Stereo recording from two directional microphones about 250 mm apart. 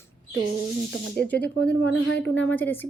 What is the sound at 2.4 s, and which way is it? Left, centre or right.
Speech, centre.